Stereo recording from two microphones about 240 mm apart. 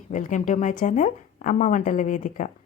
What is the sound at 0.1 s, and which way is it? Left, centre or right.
Speech, left.